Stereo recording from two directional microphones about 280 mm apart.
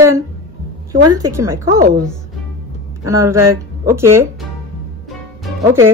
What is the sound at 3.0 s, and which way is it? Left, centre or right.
Speech, centre.